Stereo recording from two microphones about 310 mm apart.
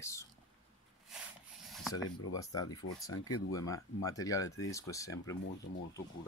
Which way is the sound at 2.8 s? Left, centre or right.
Left.